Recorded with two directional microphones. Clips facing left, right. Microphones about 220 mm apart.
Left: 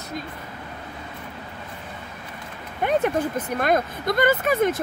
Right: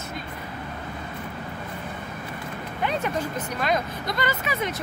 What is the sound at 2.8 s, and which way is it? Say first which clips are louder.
Speech: left 6 dB; 50° left (ahead or behind).